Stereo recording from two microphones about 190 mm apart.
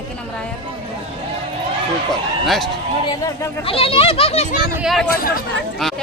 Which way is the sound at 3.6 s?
30° left (ahead or behind).